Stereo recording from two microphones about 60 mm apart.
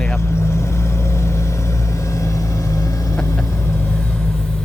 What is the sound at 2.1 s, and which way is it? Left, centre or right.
Vehicle, left.